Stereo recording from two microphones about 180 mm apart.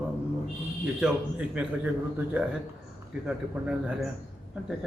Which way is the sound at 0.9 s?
5° right (ahead or behind).